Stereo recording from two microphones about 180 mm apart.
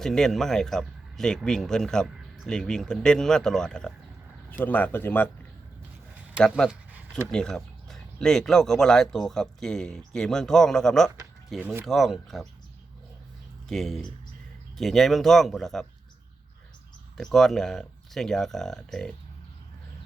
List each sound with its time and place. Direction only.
0.0 s speech: 5° left (ahead or behind)
6.4 s speech: 5° left (ahead or behind)
11.6 s speech: 10° right (ahead or behind)
11.9 s speech: centre (ahead or behind)
13.7 s speech: centre (ahead or behind)
17.2 s speech: centre (ahead or behind)